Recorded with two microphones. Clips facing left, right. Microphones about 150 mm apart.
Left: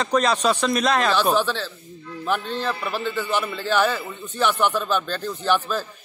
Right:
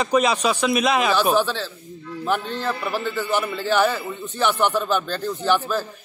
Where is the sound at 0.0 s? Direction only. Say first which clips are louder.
Right 1 dB; 5° right (ahead or behind).